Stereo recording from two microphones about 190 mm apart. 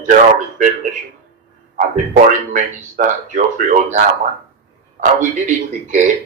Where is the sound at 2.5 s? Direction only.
45° right (ahead or behind).